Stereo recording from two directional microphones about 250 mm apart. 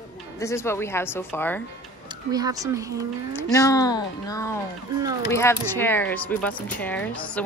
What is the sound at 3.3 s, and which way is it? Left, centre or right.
Speech, centre.